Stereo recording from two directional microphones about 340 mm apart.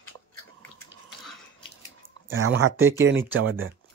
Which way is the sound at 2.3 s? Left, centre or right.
Right.